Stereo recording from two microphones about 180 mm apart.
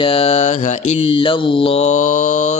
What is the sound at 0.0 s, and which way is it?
Speech, 35° left (ahead or behind).